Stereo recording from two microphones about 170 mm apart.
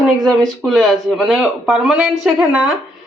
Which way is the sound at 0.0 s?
Centre (ahead or behind).